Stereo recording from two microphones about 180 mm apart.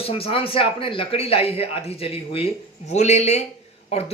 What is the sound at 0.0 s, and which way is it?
A man's voice, 30° left (ahead or behind).